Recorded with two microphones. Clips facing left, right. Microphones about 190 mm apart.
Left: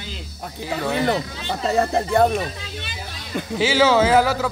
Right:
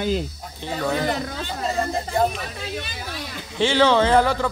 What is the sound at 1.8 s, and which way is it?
Speech, 70° left (ahead or behind).